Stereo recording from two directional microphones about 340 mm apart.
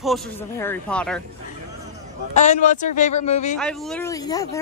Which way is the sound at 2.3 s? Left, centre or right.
Centre.